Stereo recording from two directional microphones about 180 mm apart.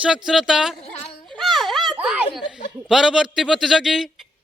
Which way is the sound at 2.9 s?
5° right (ahead or behind).